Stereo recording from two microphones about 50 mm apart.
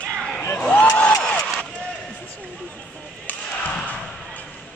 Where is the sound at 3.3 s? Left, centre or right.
Left.